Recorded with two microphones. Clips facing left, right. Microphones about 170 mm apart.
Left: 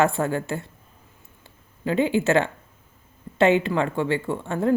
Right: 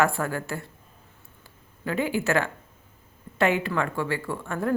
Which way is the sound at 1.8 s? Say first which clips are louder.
Left 5 dB; 25° left (ahead or behind).